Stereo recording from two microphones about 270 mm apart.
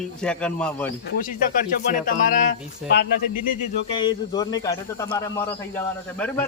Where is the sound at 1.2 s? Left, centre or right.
Left.